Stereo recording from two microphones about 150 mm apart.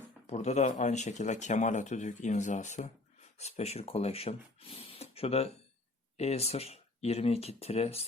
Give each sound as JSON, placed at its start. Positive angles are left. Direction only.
{"t": 0.3, "sound": "speech", "side_deg": 50}